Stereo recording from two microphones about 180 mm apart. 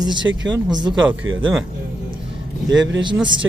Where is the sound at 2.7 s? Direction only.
90° right.